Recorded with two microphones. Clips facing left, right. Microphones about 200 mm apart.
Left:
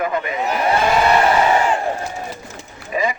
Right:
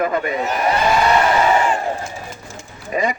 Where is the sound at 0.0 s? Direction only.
45° right (ahead or behind).